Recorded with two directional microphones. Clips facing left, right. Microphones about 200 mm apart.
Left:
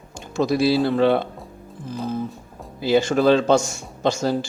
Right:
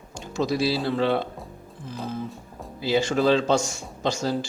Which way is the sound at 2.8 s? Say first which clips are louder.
Left 4 dB; 50° left (ahead or behind).